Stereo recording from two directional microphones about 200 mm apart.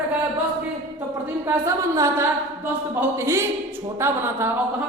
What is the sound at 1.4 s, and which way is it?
A woman's voice, 15° right (ahead or behind).